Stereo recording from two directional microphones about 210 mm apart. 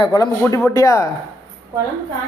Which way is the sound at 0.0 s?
20° left (ahead or behind).